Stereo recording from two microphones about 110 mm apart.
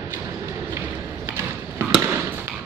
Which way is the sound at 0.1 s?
25° right (ahead or behind).